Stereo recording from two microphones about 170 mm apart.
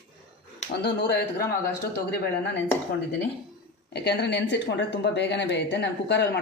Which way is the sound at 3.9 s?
80° left.